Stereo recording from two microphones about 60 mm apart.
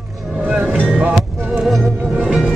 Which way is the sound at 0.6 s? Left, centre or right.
Right.